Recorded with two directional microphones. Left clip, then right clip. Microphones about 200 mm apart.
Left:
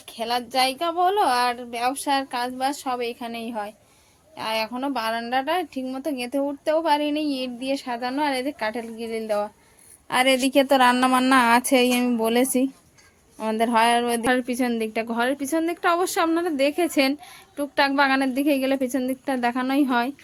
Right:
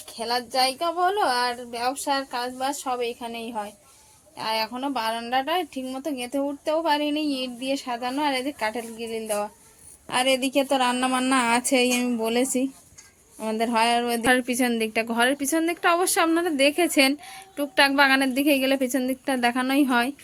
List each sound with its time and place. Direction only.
0.2 s a woman's voice: 5° left (ahead or behind)